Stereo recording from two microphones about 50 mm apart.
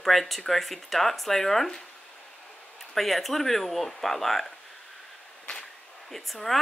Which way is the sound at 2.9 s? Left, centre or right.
Centre.